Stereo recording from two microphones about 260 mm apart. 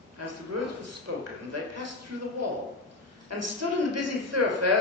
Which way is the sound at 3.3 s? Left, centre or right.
Right.